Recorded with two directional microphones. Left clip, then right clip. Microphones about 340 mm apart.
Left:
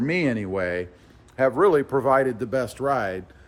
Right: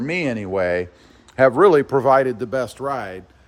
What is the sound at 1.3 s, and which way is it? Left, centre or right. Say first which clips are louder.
A man's voice: right 6 dB; right.